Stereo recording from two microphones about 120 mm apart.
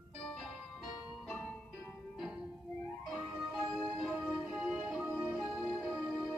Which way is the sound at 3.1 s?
Centre (ahead or behind).